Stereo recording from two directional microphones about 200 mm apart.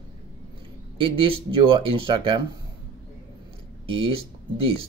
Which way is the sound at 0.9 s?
25° right (ahead or behind).